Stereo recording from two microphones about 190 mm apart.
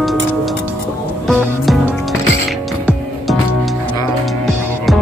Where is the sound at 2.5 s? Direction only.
Centre (ahead or behind).